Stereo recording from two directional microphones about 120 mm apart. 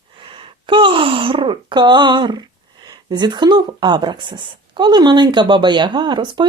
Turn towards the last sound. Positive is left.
turn(degrees=-40)  # may be behind; listen again after turning